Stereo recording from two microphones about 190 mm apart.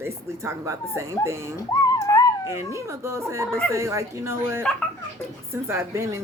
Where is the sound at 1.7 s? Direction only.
20° left (ahead or behind).